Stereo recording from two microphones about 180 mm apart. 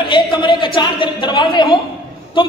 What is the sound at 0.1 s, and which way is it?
A woman's voice, 25° left (ahead or behind).